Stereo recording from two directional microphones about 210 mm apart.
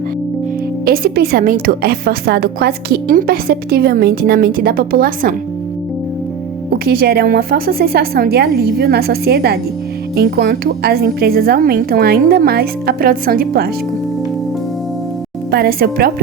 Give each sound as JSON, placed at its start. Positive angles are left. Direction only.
{"t": 0.9, "sound": "a woman's voice", "side_deg": -45}
{"t": 6.8, "sound": "a woman's voice", "side_deg": -45}
{"t": 15.4, "sound": "a woman's voice", "side_deg": -45}